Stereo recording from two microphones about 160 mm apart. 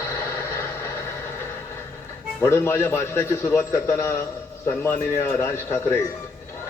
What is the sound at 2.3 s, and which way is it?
Speech, 15° left (ahead or behind).